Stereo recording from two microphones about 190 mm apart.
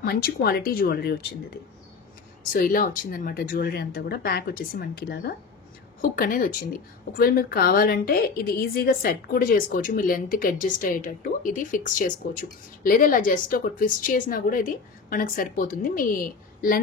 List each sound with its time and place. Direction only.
0.0 s a woman's voice: 50° left (ahead or behind)
2.5 s a woman's voice: 45° left (ahead or behind)